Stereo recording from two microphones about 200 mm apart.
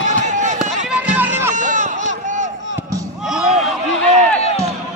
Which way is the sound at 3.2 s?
5° right (ahead or behind).